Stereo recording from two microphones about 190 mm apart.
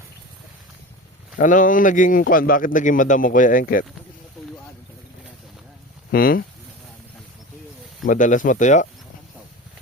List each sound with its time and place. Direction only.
1.4 s a man's voice: 45° left (ahead or behind)
6.1 s a man's voice: 50° left (ahead or behind)
8.0 s a man's voice: 45° left (ahead or behind)